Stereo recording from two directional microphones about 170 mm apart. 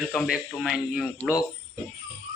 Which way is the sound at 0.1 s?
Centre (ahead or behind).